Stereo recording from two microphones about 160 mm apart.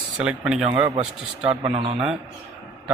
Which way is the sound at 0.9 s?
40° right (ahead or behind).